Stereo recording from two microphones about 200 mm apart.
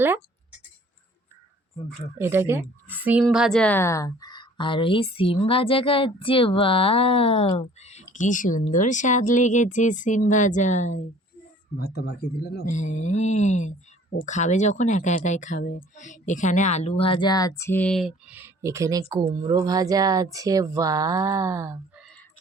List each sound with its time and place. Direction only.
2.1 s a woman's voice: 10° right (ahead or behind); by 11.0 s 35° left (ahead or behind)
11.8 s speech: 55° left (ahead or behind)
12.6 s speech: 35° left (ahead or behind); by 22.0 s 15° right (ahead or behind)